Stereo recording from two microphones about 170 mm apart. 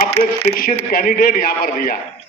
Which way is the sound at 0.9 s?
60° left (ahead or behind).